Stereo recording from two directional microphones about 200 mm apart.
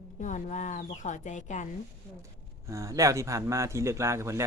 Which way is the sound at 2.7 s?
15° right (ahead or behind).